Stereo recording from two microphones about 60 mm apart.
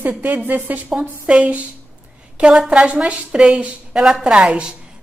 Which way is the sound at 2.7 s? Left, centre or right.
Centre.